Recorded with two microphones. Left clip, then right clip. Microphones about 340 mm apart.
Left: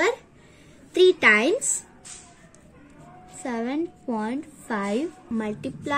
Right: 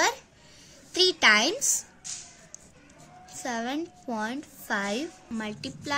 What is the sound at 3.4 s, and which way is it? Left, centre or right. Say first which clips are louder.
A woman's voice: left 3 dB; right.